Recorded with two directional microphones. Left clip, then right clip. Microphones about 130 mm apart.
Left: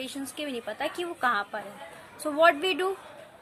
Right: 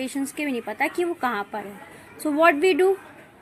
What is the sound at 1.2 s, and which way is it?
A woman's voice, 40° right (ahead or behind).